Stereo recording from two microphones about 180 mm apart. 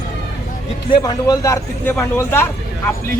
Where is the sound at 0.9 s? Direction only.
20° left (ahead or behind).